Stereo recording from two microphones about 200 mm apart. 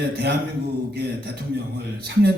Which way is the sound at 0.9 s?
50° right (ahead or behind).